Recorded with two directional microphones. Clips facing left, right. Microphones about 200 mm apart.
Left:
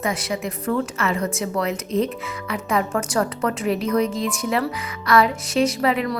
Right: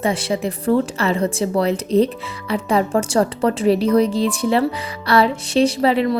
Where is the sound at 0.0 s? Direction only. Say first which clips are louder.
Right 5 dB; 30° right (ahead or behind).